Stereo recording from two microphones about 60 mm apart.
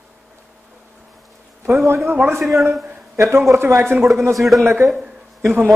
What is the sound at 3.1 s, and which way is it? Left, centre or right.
Speech, right.